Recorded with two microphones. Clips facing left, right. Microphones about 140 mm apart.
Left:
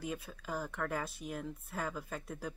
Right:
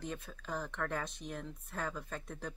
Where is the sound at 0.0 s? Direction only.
5° left (ahead or behind).